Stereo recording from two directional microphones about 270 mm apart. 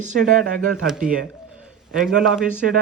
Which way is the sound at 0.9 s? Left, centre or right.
Centre.